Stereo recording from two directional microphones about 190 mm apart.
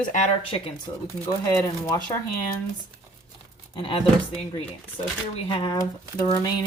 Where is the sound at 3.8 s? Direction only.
25° left (ahead or behind).